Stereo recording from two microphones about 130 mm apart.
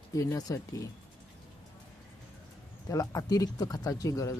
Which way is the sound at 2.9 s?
25° left (ahead or behind).